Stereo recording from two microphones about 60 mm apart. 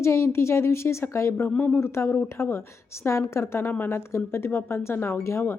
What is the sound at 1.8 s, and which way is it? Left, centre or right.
A woman's voice, left.